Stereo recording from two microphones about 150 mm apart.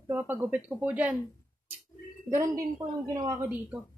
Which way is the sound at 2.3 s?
20° right (ahead or behind).